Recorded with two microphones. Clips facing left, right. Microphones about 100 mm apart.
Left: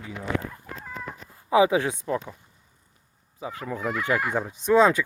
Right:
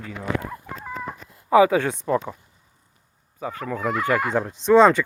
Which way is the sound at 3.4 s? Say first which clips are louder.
Right 4 dB; 15° left (ahead or behind).